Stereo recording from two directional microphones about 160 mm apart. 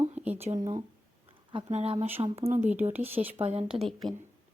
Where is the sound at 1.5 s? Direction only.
40° right (ahead or behind).